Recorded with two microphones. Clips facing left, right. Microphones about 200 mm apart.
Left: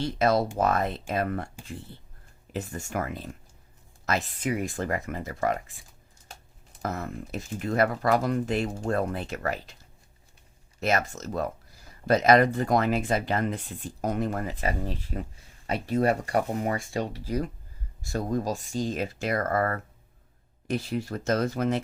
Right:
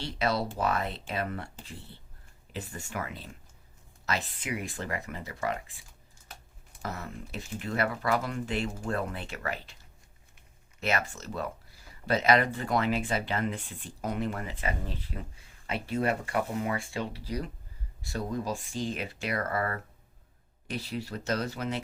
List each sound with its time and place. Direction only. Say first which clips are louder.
0.0 s speech: left 6 dB; 45° left (ahead or behind)
2.5 s speech: left 6 dB; 45° left (ahead or behind)
6.8 s speech: left 6 dB; 45° left (ahead or behind)
10.8 s speech: left 4 dB; 40° left (ahead or behind)